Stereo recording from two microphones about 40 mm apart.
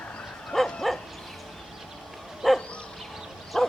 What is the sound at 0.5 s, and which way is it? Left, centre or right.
Dog, centre.